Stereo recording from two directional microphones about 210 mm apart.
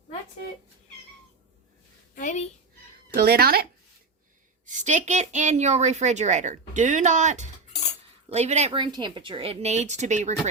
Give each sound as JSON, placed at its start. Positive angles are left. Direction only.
{"t": 2.1, "sound": "a woman's voice", "side_deg": 35}
{"t": 3.2, "sound": "speech", "side_deg": -50}
{"t": 4.6, "sound": "a woman's voice", "side_deg": -35}